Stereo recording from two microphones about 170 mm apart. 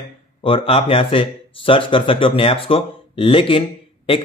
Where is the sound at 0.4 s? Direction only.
35° left (ahead or behind).